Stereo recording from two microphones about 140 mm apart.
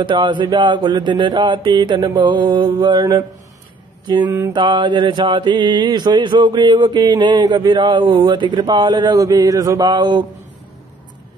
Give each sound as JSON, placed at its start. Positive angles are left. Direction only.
{"t": 0.0, "sound": "mantra", "side_deg": -35}